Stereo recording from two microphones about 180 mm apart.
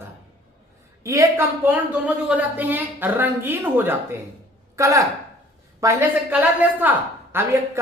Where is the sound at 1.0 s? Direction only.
15° right (ahead or behind).